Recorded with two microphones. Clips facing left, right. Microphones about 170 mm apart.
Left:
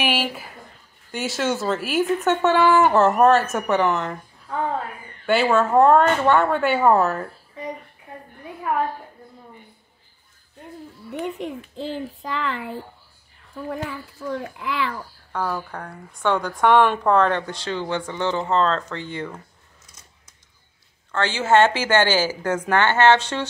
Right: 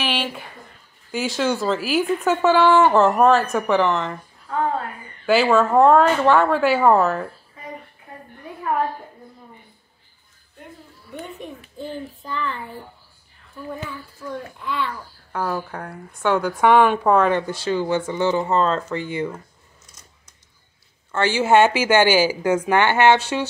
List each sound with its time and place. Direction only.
0.0 s a woman's voice: 10° left (ahead or behind)
5.2 s speech: centre (ahead or behind)
11.2 s a child's voice: 90° left
14.6 s a child's voice: 90° left
15.3 s a woman's voice: 5° right (ahead or behind)
21.1 s a woman's voice: 10° right (ahead or behind)